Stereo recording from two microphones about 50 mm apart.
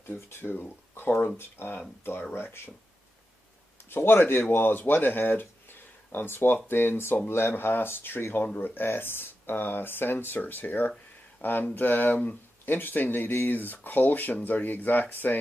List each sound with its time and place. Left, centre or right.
0.0 s speech: left
3.9 s speech: left